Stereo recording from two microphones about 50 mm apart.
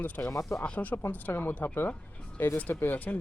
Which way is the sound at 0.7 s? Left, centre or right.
Left.